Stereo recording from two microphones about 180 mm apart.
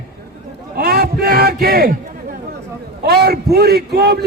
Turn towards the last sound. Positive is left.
turn(degrees=-65)  # may be behind; listen again after turning